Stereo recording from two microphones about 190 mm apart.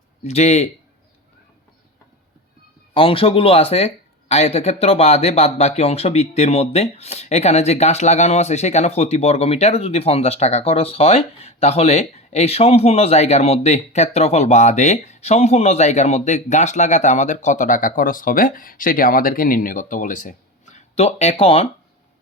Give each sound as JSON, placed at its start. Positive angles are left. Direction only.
{"t": 0.3, "sound": "speech", "side_deg": 35}
{"t": 2.9, "sound": "speech", "side_deg": 30}